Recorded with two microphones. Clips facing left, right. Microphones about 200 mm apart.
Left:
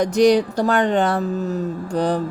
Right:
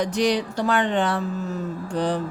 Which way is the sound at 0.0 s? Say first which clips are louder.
Left 7 dB; 45° left (ahead or behind).